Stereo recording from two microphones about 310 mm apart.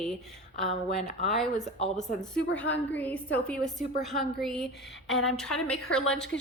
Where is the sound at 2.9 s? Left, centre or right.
Centre.